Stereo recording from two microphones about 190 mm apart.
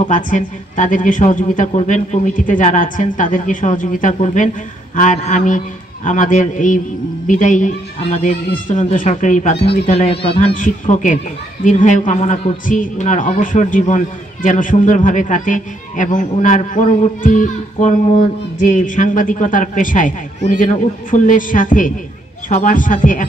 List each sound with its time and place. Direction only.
0.1 s a man's voice: 40° left (ahead or behind)
10.5 s a man's voice: 45° left (ahead or behind)